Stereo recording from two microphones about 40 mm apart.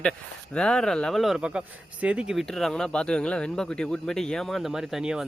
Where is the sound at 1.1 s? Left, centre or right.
Centre.